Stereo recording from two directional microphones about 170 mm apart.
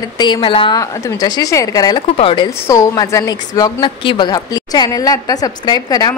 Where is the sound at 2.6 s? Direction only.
20° left (ahead or behind).